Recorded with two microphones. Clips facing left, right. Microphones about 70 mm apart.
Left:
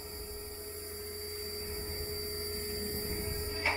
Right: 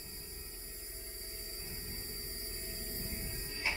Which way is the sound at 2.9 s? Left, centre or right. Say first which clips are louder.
Left 7 dB; left.